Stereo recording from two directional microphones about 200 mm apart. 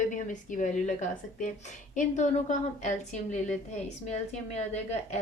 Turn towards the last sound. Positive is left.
turn(degrees=35)  # may be behind; listen again after turning